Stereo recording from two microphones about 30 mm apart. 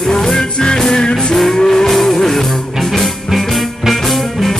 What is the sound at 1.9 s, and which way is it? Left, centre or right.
Music, centre.